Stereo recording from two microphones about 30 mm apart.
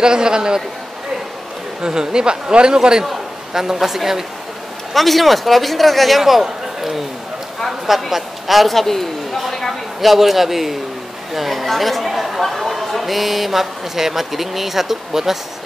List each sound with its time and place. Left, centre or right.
0.0 s speech: right
1.8 s speech: right
3.7 s a man's voice: centre
4.9 s a man's voice: centre
8.7 s a woman's voice: centre
9.9 s a man's voice: centre